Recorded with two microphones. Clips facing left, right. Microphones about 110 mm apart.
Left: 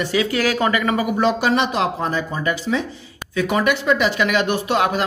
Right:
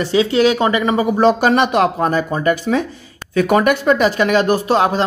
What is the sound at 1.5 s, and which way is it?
Speech, 55° right (ahead or behind).